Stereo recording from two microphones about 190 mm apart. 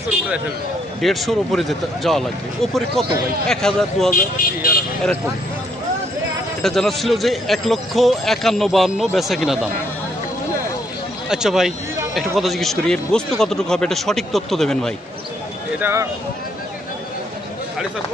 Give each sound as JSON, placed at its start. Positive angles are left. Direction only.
{"t": 1.0, "sound": "a man's voice", "side_deg": 0}
{"t": 4.1, "sound": "speech", "side_deg": 50}
{"t": 6.6, "sound": "a man's voice", "side_deg": 0}
{"t": 11.2, "sound": "a man's voice", "side_deg": -5}
{"t": 15.8, "sound": "speech", "side_deg": -15}